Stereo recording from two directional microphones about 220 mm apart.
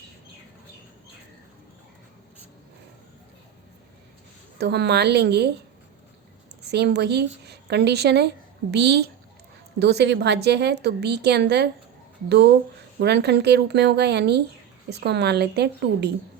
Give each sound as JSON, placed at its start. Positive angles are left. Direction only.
{"t": 4.5, "sound": "a woman's voice", "side_deg": -50}
{"t": 6.6, "sound": "a woman's voice", "side_deg": -50}